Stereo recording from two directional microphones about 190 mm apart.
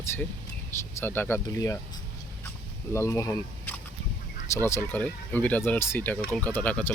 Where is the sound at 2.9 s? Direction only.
15° left (ahead or behind).